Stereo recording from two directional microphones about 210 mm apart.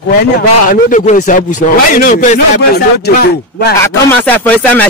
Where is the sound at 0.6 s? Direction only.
40° left (ahead or behind).